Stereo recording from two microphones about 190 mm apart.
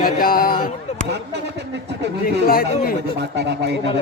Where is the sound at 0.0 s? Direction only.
50° left (ahead or behind).